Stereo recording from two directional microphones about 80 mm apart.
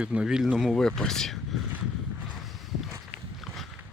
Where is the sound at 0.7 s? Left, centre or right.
Centre.